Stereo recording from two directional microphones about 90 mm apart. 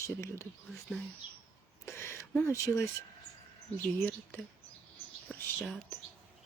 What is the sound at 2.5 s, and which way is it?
Speech, 30° left (ahead or behind).